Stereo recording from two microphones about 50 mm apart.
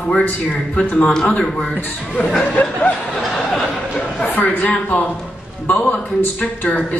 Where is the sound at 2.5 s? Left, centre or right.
Left.